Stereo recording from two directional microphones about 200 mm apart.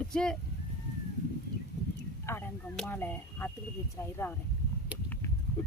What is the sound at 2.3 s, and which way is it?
Speech, 15° left (ahead or behind).